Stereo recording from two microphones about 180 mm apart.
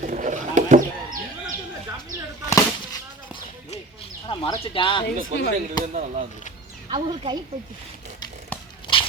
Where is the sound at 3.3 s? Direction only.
30° left (ahead or behind).